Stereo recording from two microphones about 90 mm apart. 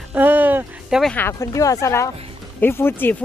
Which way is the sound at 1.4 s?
40° left (ahead or behind).